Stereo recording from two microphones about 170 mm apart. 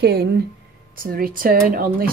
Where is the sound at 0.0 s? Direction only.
70° right (ahead or behind).